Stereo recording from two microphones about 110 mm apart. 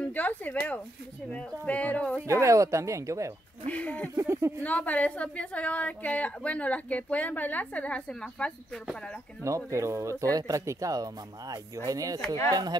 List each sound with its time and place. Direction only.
0.1 s a woman's voice: 15° left (ahead or behind)
2.2 s speech: 30° right (ahead or behind)
3.6 s a woman's voice: 15° left (ahead or behind)
4.1 s speech: 25° right (ahead or behind)
4.6 s a woman's voice: 15° left (ahead or behind)
9.4 s speech: 30° right (ahead or behind)